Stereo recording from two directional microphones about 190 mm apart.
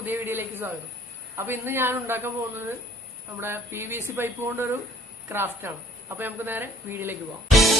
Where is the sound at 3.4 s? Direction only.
10° right (ahead or behind).